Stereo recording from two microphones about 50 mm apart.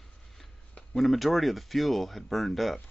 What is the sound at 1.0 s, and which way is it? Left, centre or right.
Speech, centre.